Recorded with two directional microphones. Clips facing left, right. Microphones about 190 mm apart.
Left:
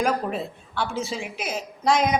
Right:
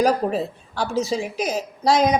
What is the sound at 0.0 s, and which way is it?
A woman's voice, 40° right (ahead or behind).